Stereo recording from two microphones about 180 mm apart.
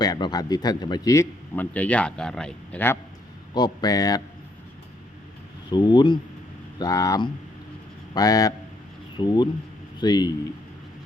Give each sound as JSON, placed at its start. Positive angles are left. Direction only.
{"t": 0.0, "sound": "a man's voice", "side_deg": 20}
{"t": 3.5, "sound": "speech", "side_deg": 25}
{"t": 5.7, "sound": "speech", "side_deg": 25}